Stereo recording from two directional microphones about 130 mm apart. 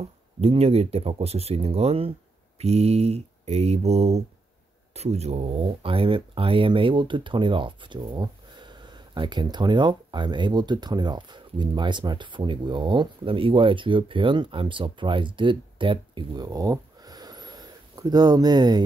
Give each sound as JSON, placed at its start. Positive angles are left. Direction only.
{"t": 0.4, "sound": "speech", "side_deg": -50}